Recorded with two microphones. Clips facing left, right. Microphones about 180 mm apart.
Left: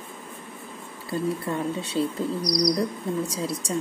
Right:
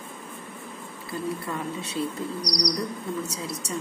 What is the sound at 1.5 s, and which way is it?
Speech, 25° left (ahead or behind).